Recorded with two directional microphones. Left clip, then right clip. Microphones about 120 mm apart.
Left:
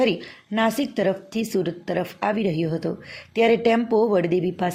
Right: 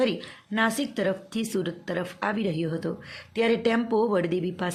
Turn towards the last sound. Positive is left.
turn(degrees=15)  # may be behind; listen again after turning